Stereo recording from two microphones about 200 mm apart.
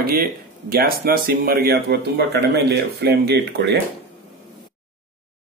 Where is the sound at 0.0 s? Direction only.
50° right (ahead or behind).